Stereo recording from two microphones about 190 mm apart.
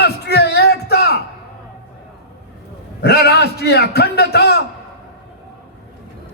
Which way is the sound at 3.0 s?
60° left (ahead or behind).